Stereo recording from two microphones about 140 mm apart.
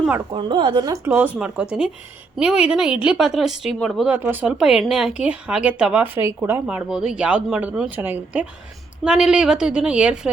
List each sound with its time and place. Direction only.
0.3 s a woman's voice: 35° right (ahead or behind)
1.0 s a woman's voice: 15° right (ahead or behind)
6.7 s a woman's voice: 5° right (ahead or behind)